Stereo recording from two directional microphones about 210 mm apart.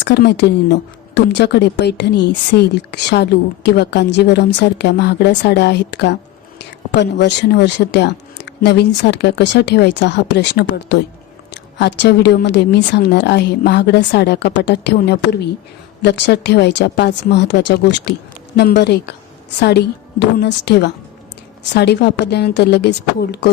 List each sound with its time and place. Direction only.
0.0 s speech: 55° left (ahead or behind)